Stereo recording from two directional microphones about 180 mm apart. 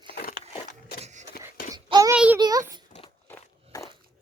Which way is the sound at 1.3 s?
50° left (ahead or behind).